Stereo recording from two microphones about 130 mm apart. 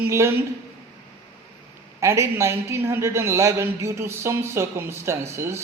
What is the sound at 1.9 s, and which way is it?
A man's voice, 20° right (ahead or behind).